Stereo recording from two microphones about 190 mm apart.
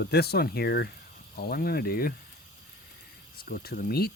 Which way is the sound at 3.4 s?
55° left (ahead or behind).